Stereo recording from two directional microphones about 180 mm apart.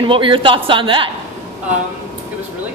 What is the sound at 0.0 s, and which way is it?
A woman's voice, 30° right (ahead or behind).